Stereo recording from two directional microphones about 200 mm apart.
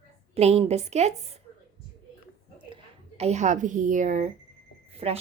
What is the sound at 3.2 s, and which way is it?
Speech, 35° right (ahead or behind).